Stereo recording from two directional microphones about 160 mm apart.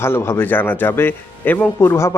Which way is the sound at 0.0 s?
15° left (ahead or behind).